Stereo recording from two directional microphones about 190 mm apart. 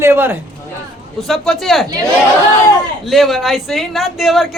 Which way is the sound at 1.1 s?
Centre (ahead or behind).